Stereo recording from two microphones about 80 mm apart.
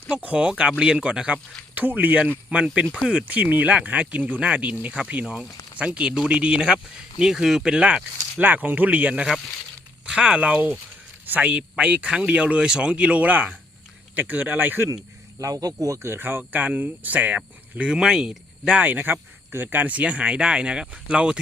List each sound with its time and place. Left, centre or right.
0.1 s speech: centre
15.4 s speech: right; by 18.8 s centre
18.8 s speech: right